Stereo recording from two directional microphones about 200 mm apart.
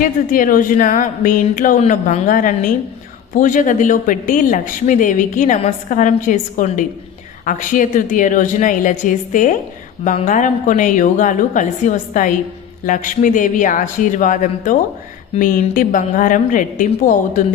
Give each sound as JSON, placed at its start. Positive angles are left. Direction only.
{"t": 0.0, "sound": "speech", "side_deg": 45}